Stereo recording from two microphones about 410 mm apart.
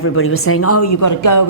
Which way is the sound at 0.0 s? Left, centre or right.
Left.